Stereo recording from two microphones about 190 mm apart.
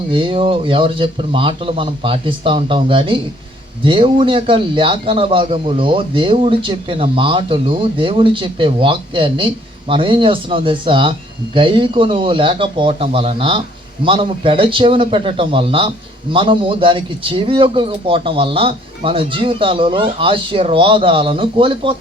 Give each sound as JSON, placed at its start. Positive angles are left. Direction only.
{"t": 0.1, "sound": "a man's voice", "side_deg": -25}